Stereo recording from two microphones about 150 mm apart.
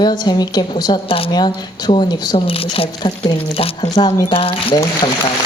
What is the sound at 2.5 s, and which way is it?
A woman's voice, 40° left (ahead or behind).